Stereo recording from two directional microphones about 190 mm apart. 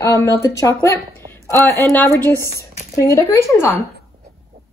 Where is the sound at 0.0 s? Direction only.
15° left (ahead or behind).